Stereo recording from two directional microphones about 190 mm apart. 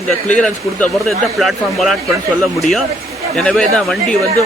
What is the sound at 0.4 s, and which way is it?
Speech, 5° left (ahead or behind).